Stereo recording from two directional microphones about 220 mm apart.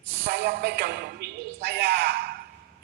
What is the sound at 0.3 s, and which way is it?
Speech, 50° right (ahead or behind).